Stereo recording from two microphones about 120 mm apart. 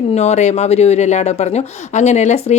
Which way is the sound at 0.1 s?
70° left (ahead or behind).